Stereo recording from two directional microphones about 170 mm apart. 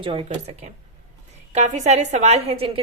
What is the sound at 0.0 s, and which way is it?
A woman's voice, 30° right (ahead or behind).